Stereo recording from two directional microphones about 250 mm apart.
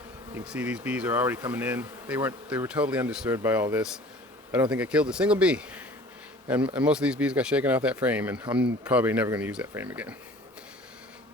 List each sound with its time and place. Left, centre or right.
0.3 s bee: centre
4.7 s speech: centre
8.8 s bee: centre